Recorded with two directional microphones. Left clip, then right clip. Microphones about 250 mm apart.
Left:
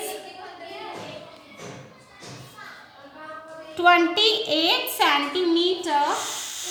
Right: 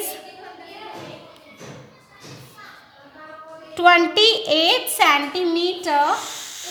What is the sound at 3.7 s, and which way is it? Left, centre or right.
A woman's voice, right.